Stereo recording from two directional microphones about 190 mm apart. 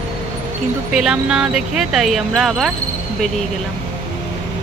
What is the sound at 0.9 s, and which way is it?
Speech, 5° right (ahead or behind).